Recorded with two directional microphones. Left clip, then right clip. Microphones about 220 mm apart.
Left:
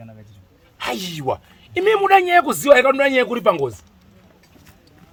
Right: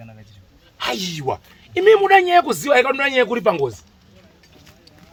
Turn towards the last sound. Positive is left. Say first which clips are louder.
# even
turn(degrees=30)  # may be behind; listen again after turning